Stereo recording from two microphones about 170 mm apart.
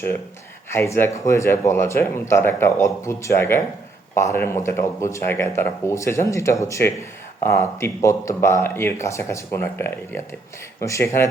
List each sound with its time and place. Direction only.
0.7 s speech: 15° left (ahead or behind)